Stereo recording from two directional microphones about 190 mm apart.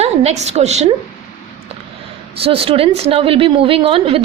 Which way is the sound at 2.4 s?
30° right (ahead or behind).